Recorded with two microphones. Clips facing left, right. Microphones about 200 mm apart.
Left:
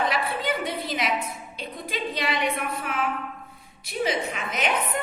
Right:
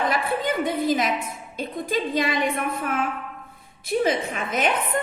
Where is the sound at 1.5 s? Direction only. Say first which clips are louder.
Right 8 dB; 50° right (ahead or behind).